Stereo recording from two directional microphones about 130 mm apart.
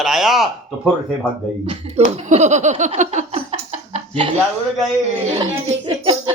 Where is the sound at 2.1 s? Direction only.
60° right (ahead or behind).